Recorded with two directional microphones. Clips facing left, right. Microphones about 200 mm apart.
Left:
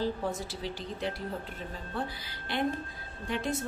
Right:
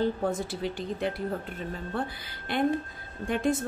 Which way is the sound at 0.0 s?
55° right (ahead or behind).